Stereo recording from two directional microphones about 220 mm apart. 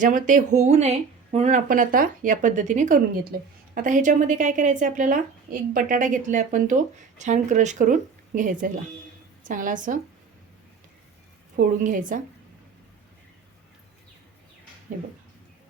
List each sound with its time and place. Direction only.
0.0 s speech: 35° right (ahead or behind)
11.5 s speech: 40° right (ahead or behind)